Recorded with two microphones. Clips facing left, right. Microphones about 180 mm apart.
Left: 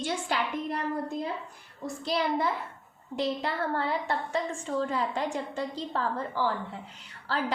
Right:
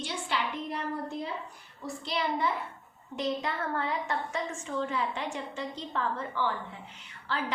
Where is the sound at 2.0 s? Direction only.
40° left (ahead or behind).